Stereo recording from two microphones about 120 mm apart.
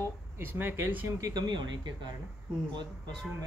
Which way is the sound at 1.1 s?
30° right (ahead or behind).